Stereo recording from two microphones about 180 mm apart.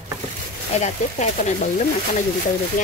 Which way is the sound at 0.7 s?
40° left (ahead or behind).